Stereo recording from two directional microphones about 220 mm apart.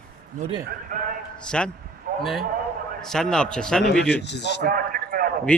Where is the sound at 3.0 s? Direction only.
5° left (ahead or behind).